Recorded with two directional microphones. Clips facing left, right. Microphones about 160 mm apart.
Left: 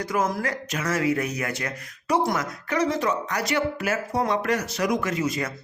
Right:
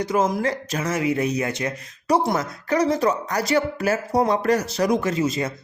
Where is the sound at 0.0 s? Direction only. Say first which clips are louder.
Right 4 dB; 20° right (ahead or behind).